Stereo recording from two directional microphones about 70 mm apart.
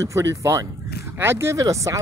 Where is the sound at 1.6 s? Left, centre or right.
Right.